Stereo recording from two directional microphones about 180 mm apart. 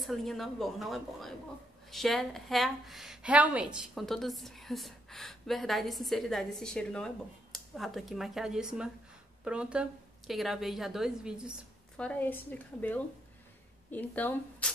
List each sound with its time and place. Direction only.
0.0 s a woman's voice: centre (ahead or behind)
12.0 s a woman's voice: 10° left (ahead or behind)